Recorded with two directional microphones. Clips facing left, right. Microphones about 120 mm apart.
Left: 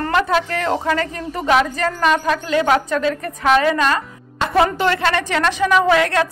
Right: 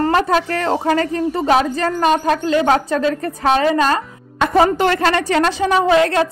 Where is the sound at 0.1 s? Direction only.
40° right (ahead or behind).